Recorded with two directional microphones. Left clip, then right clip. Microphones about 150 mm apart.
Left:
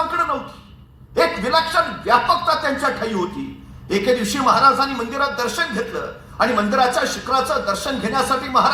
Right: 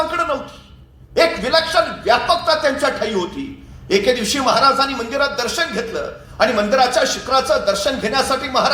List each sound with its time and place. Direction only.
1.1 s a man's voice: 20° right (ahead or behind)